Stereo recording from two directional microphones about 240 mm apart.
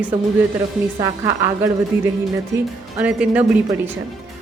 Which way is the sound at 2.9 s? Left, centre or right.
Centre.